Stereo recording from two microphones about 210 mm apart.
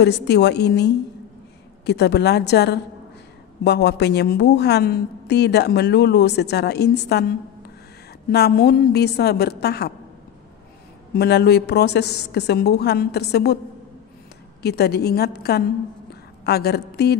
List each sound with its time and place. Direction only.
0.0 s a woman's voice: 55° left (ahead or behind)
11.1 s a woman's voice: 50° left (ahead or behind)
14.6 s a woman's voice: 50° left (ahead or behind)
16.1 s a sound: 50° left (ahead or behind)